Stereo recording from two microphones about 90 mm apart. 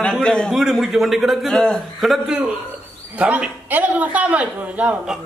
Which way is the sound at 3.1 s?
15° right (ahead or behind).